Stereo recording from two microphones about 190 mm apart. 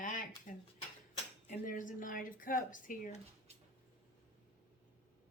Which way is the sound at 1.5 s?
45° left (ahead or behind).